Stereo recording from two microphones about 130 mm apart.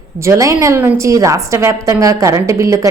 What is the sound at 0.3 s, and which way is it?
A woman's voice, 25° right (ahead or behind).